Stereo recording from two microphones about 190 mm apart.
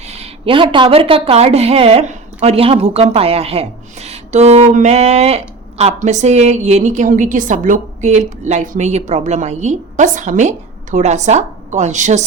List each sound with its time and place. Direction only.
0.0 s speech: 35° right (ahead or behind)